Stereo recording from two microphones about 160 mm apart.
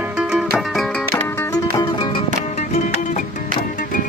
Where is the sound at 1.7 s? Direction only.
30° left (ahead or behind).